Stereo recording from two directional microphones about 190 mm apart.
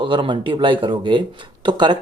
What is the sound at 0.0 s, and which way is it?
Speech, 25° right (ahead or behind).